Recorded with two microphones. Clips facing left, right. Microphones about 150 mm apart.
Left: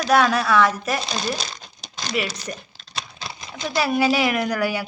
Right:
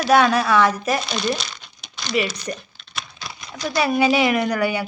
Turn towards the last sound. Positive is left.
turn(degrees=0)  # may be behind; listen again after turning